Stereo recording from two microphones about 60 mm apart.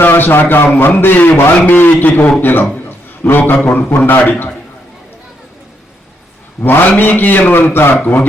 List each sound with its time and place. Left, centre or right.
0.0 s a man's voice: left
6.6 s a man's voice: left